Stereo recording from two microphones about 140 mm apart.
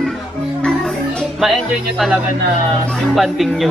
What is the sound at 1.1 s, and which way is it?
Music, centre (ahead or behind).